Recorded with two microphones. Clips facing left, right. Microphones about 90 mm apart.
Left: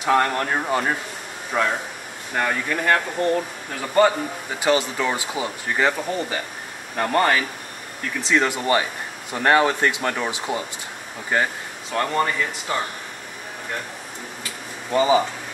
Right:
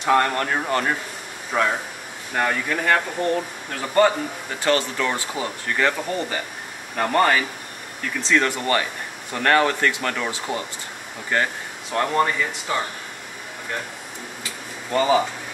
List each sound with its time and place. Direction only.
0.0 s speech: 5° left (ahead or behind)
4.6 s speech: 15° left (ahead or behind)
7.0 s speech: centre (ahead or behind)
8.2 s speech: 15° left (ahead or behind)
11.9 s speech: centre (ahead or behind)
14.9 s speech: 5° left (ahead or behind)